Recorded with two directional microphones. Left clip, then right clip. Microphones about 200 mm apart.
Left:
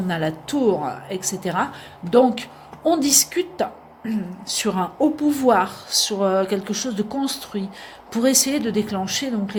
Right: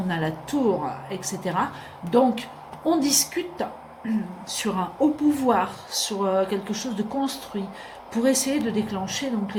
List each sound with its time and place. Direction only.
0.1 s a woman's voice: 45° left (ahead or behind)